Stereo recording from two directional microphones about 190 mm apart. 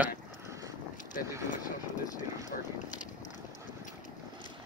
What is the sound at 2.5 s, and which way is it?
Speech, 45° left (ahead or behind).